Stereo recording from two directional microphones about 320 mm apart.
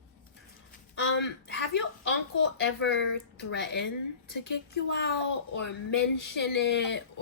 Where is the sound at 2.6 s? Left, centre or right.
Left.